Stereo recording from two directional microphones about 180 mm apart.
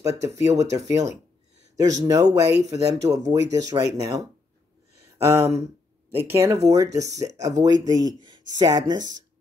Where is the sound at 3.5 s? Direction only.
20° right (ahead or behind).